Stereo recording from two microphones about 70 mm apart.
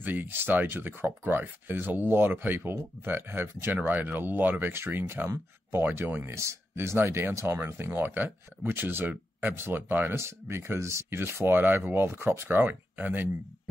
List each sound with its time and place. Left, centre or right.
0.0 s speech: right
6.3 s speech: right